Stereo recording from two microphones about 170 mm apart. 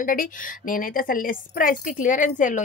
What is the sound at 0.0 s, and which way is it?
Speech, 55° left (ahead or behind).